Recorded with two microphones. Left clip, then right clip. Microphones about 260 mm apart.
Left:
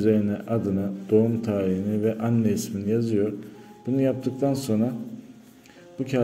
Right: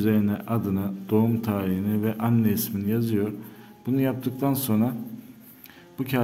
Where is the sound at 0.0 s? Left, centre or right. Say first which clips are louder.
Left 3 dB; centre.